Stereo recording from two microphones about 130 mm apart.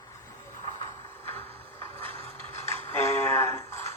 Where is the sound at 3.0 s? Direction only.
20° left (ahead or behind).